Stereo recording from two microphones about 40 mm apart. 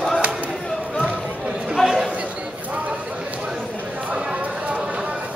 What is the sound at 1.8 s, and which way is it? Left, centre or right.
Chatter, centre.